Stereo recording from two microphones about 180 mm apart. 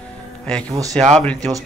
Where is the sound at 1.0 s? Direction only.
5° left (ahead or behind).